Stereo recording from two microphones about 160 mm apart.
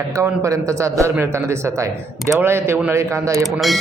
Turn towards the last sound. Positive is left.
turn(degrees=0)  # may be behind; listen again after turning